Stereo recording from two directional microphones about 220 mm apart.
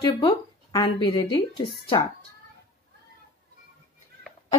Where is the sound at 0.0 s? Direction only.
20° left (ahead or behind).